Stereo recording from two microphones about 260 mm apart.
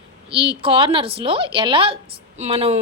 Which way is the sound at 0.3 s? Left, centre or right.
Centre.